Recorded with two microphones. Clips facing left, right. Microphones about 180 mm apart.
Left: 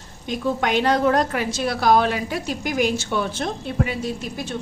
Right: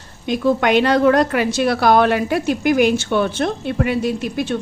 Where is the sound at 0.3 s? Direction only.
70° right (ahead or behind).